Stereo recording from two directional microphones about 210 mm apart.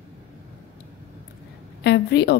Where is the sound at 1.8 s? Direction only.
55° left (ahead or behind).